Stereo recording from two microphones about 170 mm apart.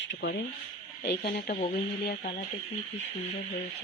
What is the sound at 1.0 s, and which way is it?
Speech, 60° left (ahead or behind).